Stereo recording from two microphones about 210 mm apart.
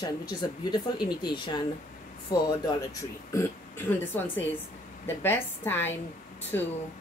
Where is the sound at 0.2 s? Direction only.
20° left (ahead or behind).